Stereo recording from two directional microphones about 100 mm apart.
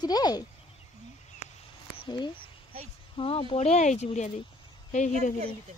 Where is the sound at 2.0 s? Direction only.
50° left (ahead or behind); by 4.2 s 90° left.